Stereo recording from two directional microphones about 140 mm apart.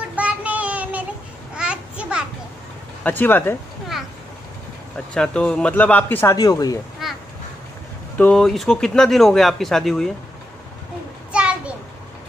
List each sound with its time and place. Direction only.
0.1 s child singing: 10° right (ahead or behind)
1.5 s babbling: 5° right (ahead or behind)
3.0 s speech: 15° left (ahead or behind)
4.9 s speech: 5° left (ahead or behind)
6.3 s speech: 25° left (ahead or behind)
7.0 s crow: centre (ahead or behind)
8.2 s speech: 5° left (ahead or behind)
11.3 s a sound: 10° right (ahead or behind)